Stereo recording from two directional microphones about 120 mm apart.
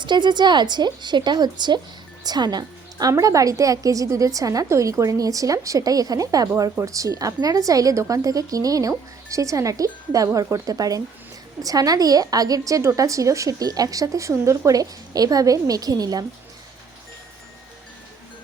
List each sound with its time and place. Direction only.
0.0 s a woman's voice: 40° right (ahead or behind)